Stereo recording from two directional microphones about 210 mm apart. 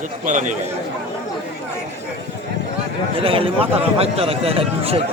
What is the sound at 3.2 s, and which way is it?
A man's voice, 25° right (ahead or behind).